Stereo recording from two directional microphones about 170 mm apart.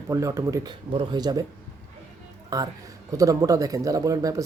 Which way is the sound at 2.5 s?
20° right (ahead or behind).